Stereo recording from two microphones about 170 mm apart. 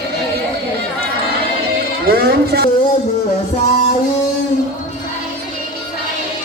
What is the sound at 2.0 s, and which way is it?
Speech, 65° right (ahead or behind).